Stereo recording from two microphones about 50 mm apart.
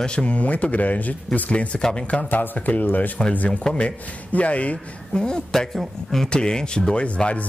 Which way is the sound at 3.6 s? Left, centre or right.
Centre.